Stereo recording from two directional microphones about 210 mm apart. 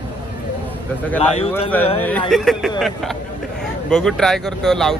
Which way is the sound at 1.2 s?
30° left (ahead or behind).